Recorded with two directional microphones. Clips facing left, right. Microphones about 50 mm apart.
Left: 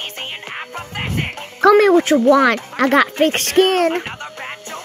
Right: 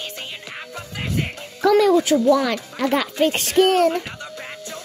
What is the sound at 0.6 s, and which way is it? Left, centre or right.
Music, left.